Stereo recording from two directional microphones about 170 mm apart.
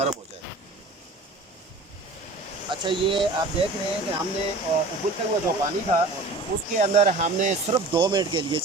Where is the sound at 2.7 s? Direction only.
30° right (ahead or behind).